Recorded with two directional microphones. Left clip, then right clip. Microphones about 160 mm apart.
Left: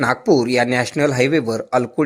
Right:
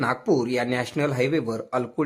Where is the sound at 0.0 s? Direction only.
20° left (ahead or behind).